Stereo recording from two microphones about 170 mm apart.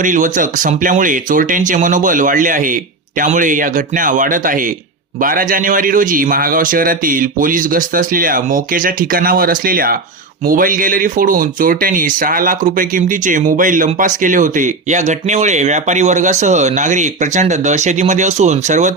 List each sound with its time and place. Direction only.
0.0 s a man's voice: 50° right (ahead or behind)